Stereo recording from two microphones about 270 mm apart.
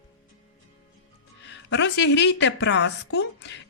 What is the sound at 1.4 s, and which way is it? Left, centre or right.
Speech, left.